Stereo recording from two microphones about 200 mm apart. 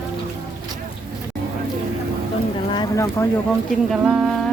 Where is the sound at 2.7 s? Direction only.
20° left (ahead or behind).